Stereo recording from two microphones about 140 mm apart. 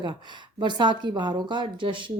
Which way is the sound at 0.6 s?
30° right (ahead or behind).